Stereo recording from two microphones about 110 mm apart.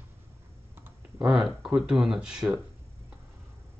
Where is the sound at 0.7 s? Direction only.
20° right (ahead or behind).